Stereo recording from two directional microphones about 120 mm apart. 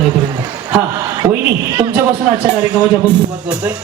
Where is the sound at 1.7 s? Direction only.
40° right (ahead or behind).